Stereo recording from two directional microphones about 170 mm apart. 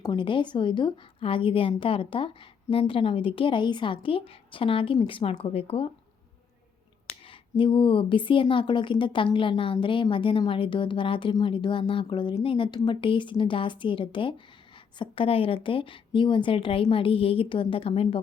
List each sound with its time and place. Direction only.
0.0 s a woman's voice: 25° left (ahead or behind)
7.1 s a woman's voice: 30° left (ahead or behind)